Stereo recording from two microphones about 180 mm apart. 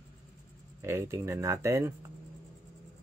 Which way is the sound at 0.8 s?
15° right (ahead or behind).